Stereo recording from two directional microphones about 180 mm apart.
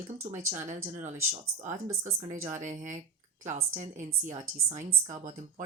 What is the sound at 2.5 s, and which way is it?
Speech, 45° right (ahead or behind).